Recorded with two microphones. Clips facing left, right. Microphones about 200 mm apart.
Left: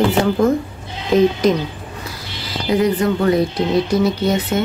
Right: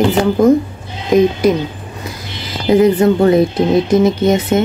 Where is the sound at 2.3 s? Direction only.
20° right (ahead or behind).